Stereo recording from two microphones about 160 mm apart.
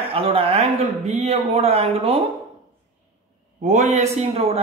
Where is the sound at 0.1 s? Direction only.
35° right (ahead or behind).